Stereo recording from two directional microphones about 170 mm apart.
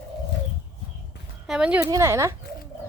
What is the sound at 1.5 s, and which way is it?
Speech, 5° right (ahead or behind).